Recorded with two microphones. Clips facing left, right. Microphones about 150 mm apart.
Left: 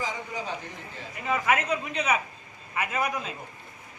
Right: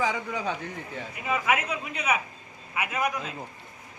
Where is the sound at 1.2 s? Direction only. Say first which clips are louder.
Left 1 dB; 5° right (ahead or behind).